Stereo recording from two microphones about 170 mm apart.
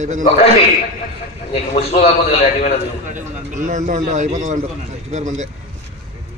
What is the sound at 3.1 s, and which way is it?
A man's voice, 45° right (ahead or behind).